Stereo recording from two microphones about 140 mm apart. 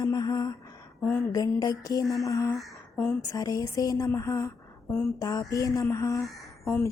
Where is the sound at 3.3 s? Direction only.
25° left (ahead or behind).